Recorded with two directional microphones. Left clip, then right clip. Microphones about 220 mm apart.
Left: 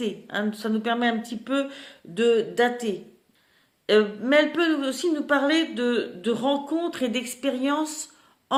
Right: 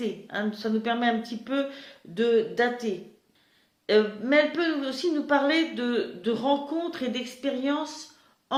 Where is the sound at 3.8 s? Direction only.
30° left (ahead or behind).